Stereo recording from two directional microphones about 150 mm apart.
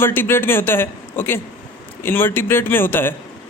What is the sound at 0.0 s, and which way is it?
A man's voice, 15° left (ahead or behind).